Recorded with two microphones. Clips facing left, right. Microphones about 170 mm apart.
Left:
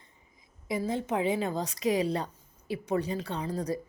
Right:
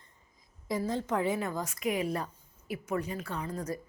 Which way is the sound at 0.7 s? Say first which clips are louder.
Left 1 dB; 10° left (ahead or behind).